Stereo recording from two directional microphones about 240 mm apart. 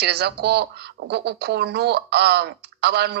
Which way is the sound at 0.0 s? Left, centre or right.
Right.